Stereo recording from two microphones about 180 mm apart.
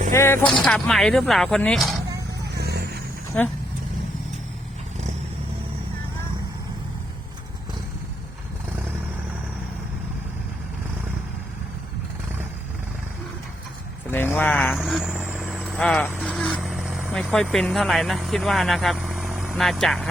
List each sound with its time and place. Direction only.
0.1 s speech: 15° left (ahead or behind)
2.6 s vehicle: 65° right (ahead or behind)
3.3 s speech: 5° left (ahead or behind)
14.1 s speech: 10° left (ahead or behind)
14.8 s vehicle: centre (ahead or behind)
16.1 s speech: centre (ahead or behind)